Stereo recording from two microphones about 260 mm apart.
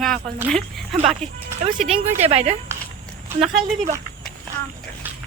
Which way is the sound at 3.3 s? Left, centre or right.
Centre.